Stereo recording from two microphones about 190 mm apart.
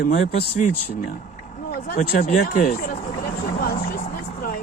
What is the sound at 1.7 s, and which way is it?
Speech, 50° left (ahead or behind).